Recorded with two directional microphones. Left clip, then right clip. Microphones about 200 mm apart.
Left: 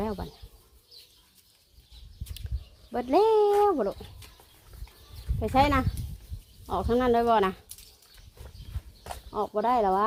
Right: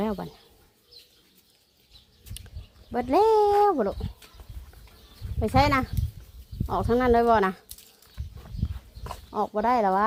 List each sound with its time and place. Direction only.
0.0 s bird: 20° right (ahead or behind)
2.4 s a sound: 5° right (ahead or behind)
2.9 s speech: 5° right (ahead or behind)
5.4 s speech: 10° right (ahead or behind)
9.3 s speech: 10° right (ahead or behind)